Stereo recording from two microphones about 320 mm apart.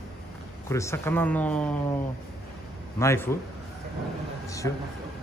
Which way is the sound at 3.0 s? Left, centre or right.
Centre.